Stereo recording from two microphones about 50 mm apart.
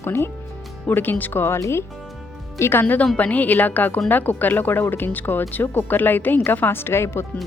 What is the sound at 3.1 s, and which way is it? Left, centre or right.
A woman's voice, left.